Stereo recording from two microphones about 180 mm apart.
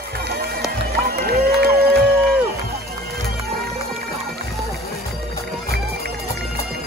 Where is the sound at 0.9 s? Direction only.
60° right (ahead or behind).